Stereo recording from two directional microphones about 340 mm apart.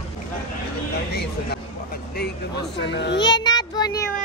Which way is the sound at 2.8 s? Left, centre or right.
Left.